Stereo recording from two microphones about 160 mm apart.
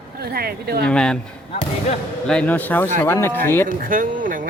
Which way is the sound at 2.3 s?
5° left (ahead or behind).